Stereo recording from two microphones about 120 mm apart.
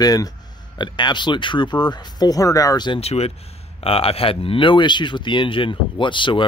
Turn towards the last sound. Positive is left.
turn(degrees=45)  # may be behind; listen again after turning